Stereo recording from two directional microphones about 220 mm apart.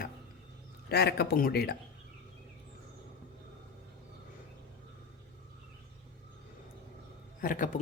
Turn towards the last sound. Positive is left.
turn(degrees=40)  # may be behind; listen again after turning